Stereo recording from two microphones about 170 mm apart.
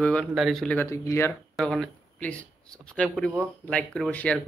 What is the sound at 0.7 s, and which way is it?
Speech, 20° left (ahead or behind).